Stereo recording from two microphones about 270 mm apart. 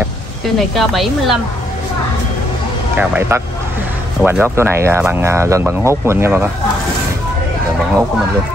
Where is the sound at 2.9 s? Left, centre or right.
Centre.